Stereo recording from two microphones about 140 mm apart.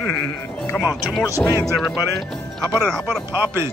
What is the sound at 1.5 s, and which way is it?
Speech, 25° left (ahead or behind).